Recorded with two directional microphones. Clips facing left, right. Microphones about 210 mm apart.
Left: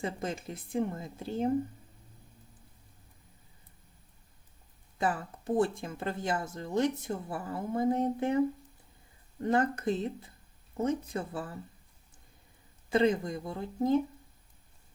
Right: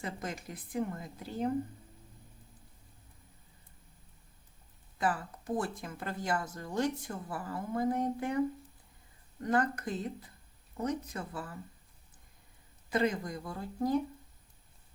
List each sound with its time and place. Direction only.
0.0 s speech: 25° left (ahead or behind)
4.9 s speech: 25° left (ahead or behind)
12.9 s speech: 25° left (ahead or behind)